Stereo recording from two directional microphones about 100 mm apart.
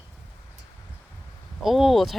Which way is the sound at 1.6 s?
Centre (ahead or behind).